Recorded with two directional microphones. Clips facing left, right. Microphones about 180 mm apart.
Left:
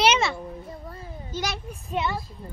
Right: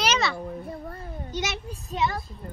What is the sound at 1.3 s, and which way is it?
Speech, 25° right (ahead or behind).